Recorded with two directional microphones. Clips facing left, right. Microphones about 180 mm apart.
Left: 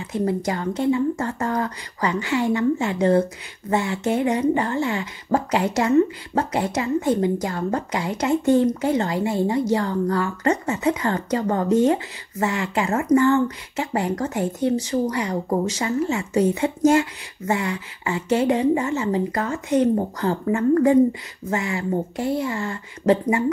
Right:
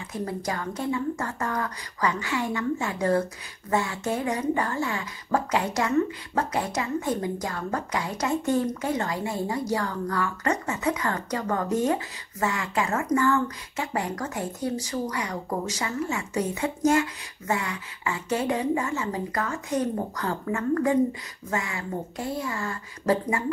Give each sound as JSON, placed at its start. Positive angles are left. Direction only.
{"t": 0.0, "sound": "speech", "side_deg": 25}